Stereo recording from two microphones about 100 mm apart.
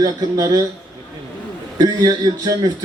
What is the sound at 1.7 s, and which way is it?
Speech, 40° right (ahead or behind).